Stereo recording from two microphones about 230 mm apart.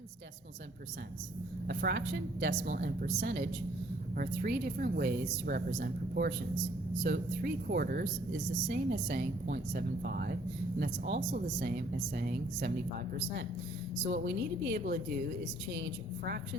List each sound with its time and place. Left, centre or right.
1.6 s a woman's voice: right
14.3 s a woman's voice: right